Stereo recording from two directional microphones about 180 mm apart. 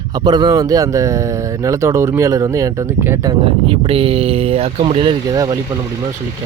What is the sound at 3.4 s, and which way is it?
Speech, 30° right (ahead or behind).